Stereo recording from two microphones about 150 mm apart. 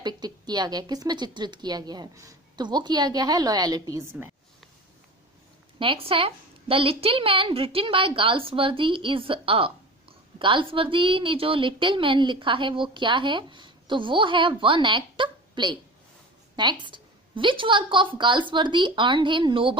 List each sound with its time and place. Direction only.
0.0 s speech: 30° right (ahead or behind)
5.8 s a woman's voice: 35° right (ahead or behind)